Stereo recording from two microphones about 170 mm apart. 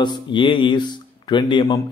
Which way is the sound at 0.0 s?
25° left (ahead or behind).